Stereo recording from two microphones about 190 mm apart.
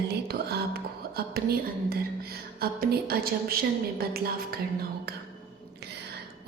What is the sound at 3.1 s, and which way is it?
A woman's voice, 55° right (ahead or behind).